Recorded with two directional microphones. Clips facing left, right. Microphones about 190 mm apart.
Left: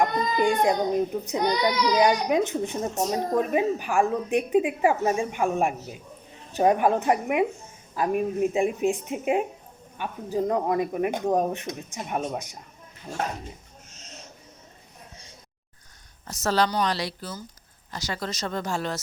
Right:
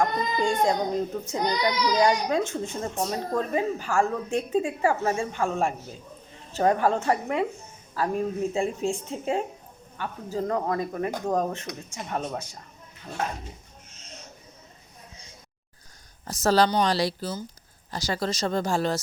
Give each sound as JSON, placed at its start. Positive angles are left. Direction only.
{"t": 0.0, "sound": "a woman's voice", "side_deg": 15}
{"t": 16.4, "sound": "speech", "side_deg": -35}